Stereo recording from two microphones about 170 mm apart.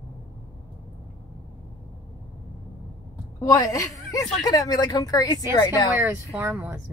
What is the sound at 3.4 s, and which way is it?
A woman's voice, 20° left (ahead or behind).